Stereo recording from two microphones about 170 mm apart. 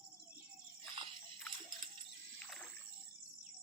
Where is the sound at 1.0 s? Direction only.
30° right (ahead or behind).